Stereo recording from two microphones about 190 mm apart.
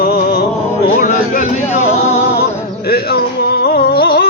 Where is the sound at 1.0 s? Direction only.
45° left (ahead or behind).